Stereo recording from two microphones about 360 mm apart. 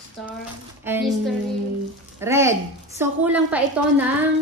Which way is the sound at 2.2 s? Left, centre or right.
Centre.